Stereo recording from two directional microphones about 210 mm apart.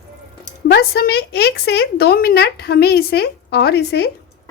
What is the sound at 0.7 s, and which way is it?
A woman's voice, 50° left (ahead or behind).